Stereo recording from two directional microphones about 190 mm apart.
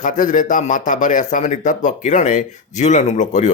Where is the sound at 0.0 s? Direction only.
40° left (ahead or behind).